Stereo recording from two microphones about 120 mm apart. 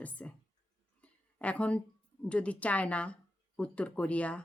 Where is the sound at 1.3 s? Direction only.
10° left (ahead or behind).